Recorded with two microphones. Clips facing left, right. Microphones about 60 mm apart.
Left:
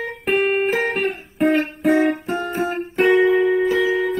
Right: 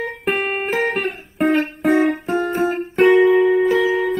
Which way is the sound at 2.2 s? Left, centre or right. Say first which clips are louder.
Right 4 dB; right.